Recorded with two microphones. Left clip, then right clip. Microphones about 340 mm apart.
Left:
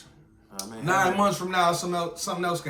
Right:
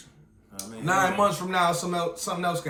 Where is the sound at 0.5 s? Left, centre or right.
Centre.